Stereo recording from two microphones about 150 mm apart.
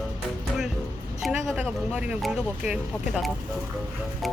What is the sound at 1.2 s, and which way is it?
Speech, 5° right (ahead or behind).